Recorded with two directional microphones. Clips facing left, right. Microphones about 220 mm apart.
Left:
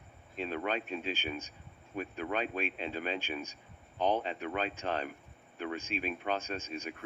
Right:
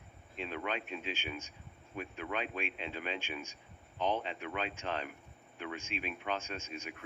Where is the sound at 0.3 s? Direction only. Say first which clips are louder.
Left 4 dB; 40° left (ahead or behind).